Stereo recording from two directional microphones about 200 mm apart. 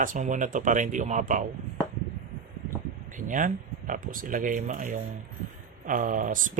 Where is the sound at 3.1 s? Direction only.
40° right (ahead or behind).